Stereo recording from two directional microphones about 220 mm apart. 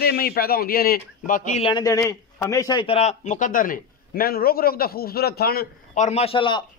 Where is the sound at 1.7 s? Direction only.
15° left (ahead or behind); by 6.1 s 45° left (ahead or behind).